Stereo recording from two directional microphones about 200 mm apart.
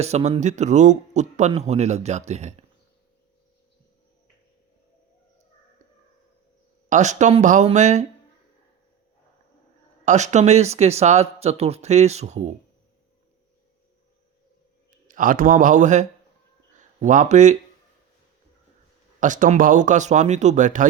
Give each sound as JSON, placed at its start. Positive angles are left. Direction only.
{"t": 0.0, "sound": "speech", "side_deg": -30}
{"t": 6.9, "sound": "speech", "side_deg": -35}
{"t": 10.1, "sound": "speech", "side_deg": -35}
{"t": 15.0, "sound": "speech", "side_deg": -40}
{"t": 19.2, "sound": "speech", "side_deg": -40}